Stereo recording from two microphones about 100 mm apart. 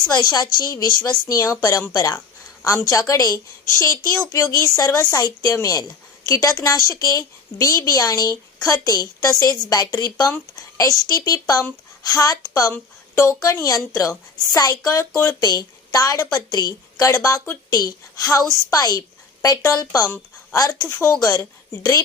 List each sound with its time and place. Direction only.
0.1 s a woman's voice: 45° left (ahead or behind); by 15.4 s 30° left (ahead or behind)
15.4 s a woman's voice: 40° left (ahead or behind)